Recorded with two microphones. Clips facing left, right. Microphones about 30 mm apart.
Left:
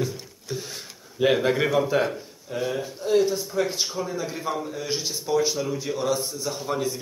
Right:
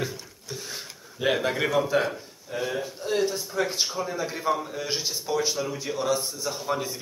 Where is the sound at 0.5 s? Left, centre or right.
Centre.